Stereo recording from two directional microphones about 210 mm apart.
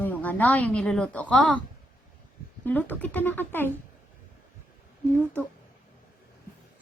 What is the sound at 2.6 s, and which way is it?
Speech, 10° left (ahead or behind).